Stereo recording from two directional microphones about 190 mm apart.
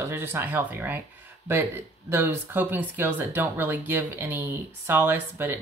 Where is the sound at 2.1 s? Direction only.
10° right (ahead or behind).